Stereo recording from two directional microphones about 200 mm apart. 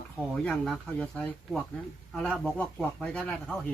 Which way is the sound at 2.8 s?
5° left (ahead or behind).